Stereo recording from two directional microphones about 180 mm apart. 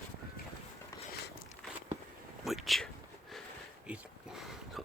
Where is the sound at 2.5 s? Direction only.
Centre (ahead or behind).